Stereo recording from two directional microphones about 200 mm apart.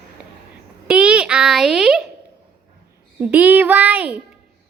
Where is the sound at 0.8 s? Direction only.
5° right (ahead or behind).